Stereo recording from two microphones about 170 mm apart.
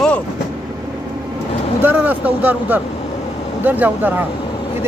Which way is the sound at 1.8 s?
10° right (ahead or behind).